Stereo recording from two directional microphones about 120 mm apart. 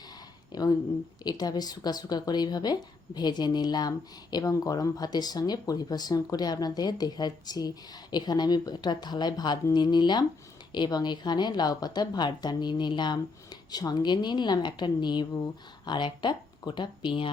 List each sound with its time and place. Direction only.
0.5 s a woman's voice: 35° left (ahead or behind)